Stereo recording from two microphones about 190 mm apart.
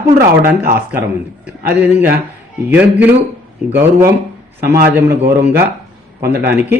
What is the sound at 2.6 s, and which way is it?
A man's voice, 10° right (ahead or behind).